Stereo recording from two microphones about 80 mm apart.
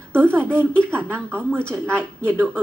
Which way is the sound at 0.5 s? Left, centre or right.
Centre.